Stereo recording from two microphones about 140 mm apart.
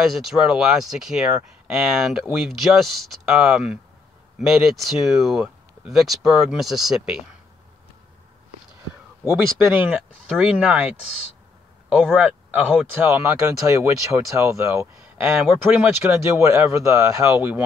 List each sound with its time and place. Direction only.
0.0 s speech: centre (ahead or behind)
9.7 s speech: 10° right (ahead or behind)
11.9 s speech: 10° right (ahead or behind)